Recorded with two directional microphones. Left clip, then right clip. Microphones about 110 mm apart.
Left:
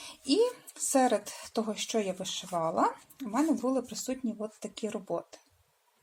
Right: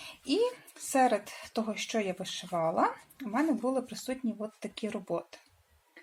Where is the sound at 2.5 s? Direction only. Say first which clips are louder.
Even; 20° left (ahead or behind).